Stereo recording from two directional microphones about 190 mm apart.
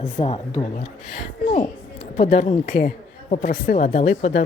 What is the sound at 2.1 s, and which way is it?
Speech, 30° left (ahead or behind).